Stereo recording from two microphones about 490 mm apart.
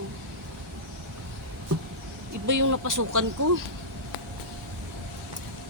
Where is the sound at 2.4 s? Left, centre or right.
Right.